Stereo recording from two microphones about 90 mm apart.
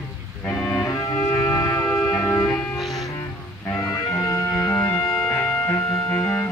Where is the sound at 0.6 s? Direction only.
20° left (ahead or behind).